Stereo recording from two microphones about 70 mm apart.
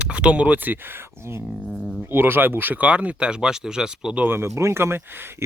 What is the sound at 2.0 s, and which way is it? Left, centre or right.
Speech, right.